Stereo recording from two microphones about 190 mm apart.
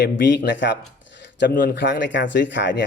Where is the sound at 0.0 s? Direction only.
70° left (ahead or behind).